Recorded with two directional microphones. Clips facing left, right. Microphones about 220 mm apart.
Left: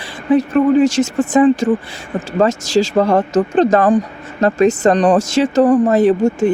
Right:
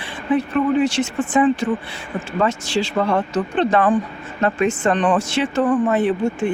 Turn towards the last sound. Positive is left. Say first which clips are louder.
# left 7 dB
turn(degrees=45)  # may be behind; listen again after turning